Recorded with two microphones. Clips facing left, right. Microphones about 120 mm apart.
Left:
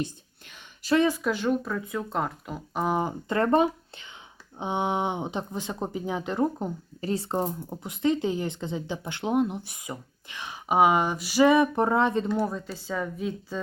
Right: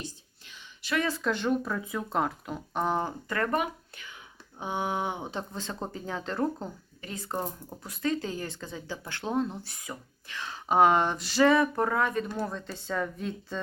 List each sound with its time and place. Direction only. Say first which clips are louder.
0.0 s whispering: left 10 dB; 55° left (ahead or behind)
1.0 s speech: left 4 dB; 10° left (ahead or behind)
7.0 s speech: left 7 dB; 30° left (ahead or behind)
12.4 s speech: left 5 dB; 10° left (ahead or behind)